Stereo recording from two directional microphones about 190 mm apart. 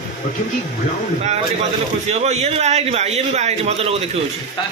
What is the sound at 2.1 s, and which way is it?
A man's voice, 35° right (ahead or behind).